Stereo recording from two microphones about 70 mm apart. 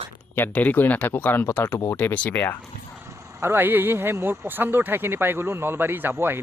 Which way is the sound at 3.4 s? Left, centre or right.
Right.